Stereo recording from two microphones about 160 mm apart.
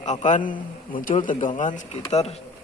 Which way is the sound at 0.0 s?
50° left (ahead or behind).